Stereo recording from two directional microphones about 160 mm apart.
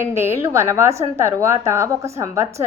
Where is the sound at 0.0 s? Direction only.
15° right (ahead or behind).